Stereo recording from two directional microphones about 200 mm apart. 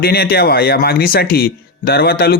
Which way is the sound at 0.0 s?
50° left (ahead or behind).